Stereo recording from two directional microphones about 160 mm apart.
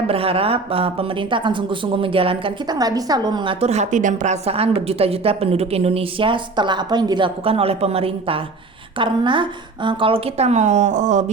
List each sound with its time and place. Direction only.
0.1 s a woman's voice: 35° right (ahead or behind)